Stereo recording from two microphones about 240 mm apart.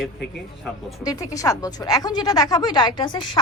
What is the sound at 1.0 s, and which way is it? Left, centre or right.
A woman's voice, centre.